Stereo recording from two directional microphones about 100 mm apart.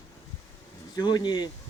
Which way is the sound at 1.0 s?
45° left (ahead or behind).